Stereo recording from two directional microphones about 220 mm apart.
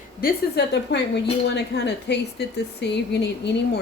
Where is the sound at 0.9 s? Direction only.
50° left (ahead or behind).